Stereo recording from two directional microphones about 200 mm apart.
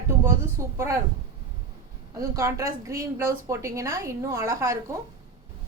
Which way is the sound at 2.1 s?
15° right (ahead or behind).